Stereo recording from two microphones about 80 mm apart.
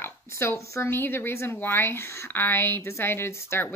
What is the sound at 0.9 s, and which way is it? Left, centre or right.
A woman's voice, left.